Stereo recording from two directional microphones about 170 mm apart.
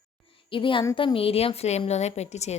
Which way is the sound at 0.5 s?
30° left (ahead or behind).